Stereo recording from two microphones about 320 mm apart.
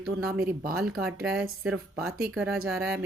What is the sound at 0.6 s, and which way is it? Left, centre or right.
Speech, right.